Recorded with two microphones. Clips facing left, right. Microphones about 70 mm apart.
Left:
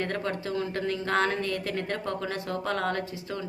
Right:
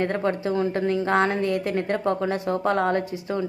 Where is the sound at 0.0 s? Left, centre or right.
Right.